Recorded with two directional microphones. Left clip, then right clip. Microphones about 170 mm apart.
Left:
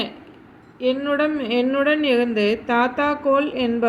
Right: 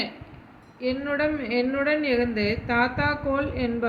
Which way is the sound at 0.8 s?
30° left (ahead or behind).